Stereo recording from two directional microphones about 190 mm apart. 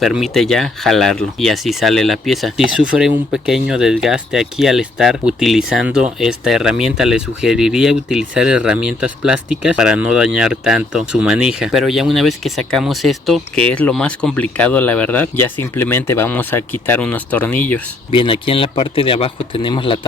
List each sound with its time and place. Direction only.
0.0 s speech: centre (ahead or behind)
18.1 s speech: 25° left (ahead or behind)